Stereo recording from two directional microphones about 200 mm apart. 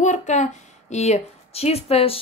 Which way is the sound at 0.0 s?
35° left (ahead or behind).